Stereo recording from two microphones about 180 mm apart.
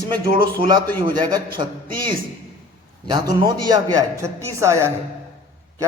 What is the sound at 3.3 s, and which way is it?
A man's voice, 20° right (ahead or behind).